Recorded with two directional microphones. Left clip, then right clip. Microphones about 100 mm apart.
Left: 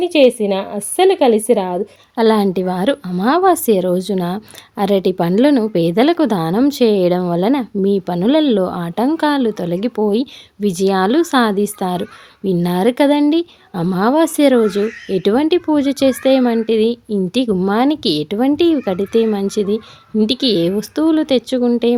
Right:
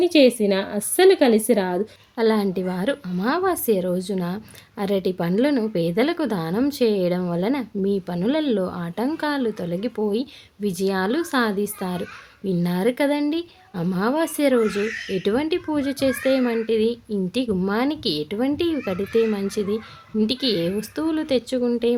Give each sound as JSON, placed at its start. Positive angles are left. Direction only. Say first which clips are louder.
{"t": 0.0, "sound": "a woman's voice", "louder": "left 4 dB", "side_deg": 35}
{"t": 2.1, "sound": "a woman's voice", "louder": "left 7 dB", "side_deg": 55}